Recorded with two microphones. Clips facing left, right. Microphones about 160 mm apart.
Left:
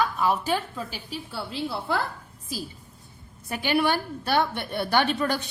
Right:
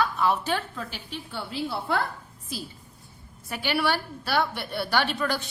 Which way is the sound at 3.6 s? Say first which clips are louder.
Left 3 dB; 15° left (ahead or behind).